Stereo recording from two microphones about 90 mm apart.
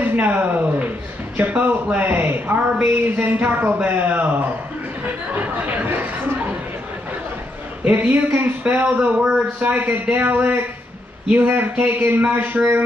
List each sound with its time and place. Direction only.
0.0 s a man's voice: 20° right (ahead or behind)
7.8 s a man's voice: 20° right (ahead or behind)